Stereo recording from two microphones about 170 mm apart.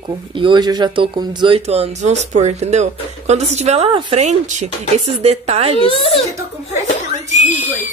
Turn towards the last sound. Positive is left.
turn(degrees=45)  # may be behind; listen again after turning